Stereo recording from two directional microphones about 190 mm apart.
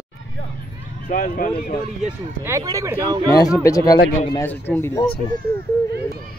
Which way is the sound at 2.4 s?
15° right (ahead or behind).